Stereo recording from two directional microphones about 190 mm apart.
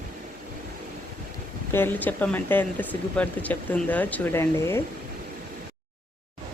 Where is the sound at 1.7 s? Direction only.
10° left (ahead or behind).